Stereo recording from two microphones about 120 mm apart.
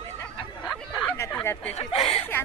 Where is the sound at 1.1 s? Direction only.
15° left (ahead or behind).